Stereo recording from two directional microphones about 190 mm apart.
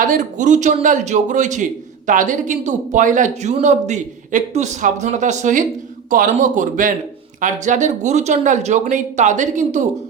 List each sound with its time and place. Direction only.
0.0 s a man's voice: 45° right (ahead or behind)